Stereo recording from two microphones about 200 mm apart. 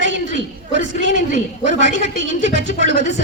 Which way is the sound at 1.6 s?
65° right (ahead or behind).